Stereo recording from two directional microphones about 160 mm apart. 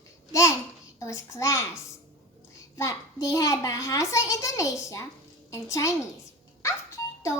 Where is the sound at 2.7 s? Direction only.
20° left (ahead or behind).